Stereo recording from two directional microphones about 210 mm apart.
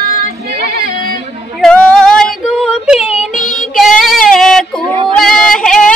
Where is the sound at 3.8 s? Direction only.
Centre (ahead or behind).